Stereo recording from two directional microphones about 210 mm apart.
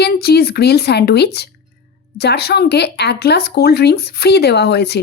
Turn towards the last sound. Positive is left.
turn(degrees=50)  # may be behind; listen again after turning